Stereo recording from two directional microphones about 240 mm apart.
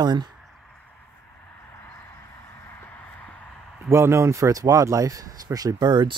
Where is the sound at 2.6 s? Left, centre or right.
Centre.